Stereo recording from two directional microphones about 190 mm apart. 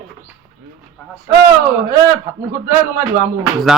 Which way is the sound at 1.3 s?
20° right (ahead or behind).